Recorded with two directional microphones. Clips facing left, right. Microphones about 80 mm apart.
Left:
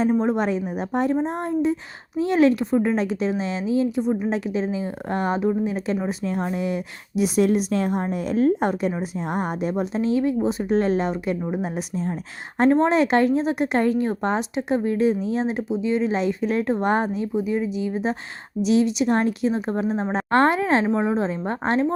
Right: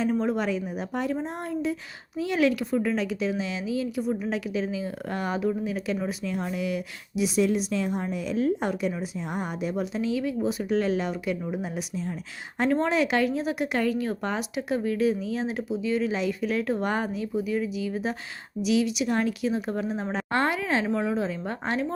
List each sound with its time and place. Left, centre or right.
0.0 s a woman's voice: left